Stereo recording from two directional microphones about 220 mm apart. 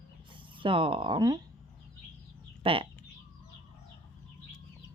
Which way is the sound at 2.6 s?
25° right (ahead or behind).